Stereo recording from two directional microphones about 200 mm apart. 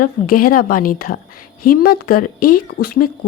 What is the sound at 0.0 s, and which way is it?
A woman's voice, 45° left (ahead or behind).